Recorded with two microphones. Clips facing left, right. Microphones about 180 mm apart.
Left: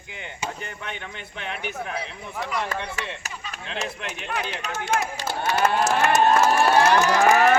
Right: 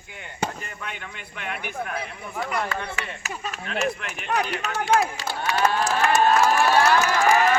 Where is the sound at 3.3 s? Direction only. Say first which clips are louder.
Right 5 dB; 45° right (ahead or behind).